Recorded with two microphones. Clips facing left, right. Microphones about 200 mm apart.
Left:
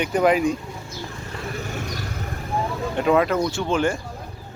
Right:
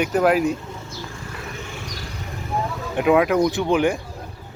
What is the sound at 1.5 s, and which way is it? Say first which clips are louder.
Vehicle: left 4 dB; 45° left (ahead or behind).